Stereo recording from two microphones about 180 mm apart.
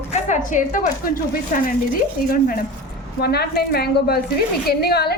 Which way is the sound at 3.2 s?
60° left (ahead or behind).